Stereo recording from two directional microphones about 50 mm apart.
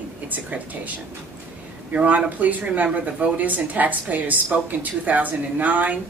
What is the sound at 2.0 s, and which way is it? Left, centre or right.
Speech, right.